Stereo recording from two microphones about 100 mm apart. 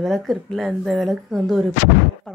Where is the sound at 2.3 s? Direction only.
10° left (ahead or behind).